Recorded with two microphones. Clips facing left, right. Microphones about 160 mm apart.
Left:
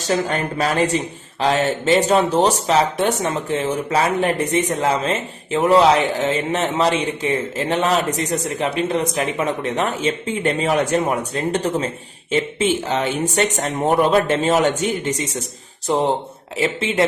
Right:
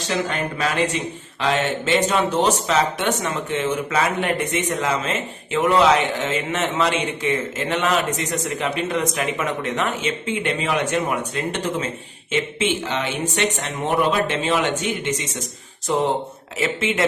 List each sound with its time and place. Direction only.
0.1 s a man's voice: 40° left (ahead or behind)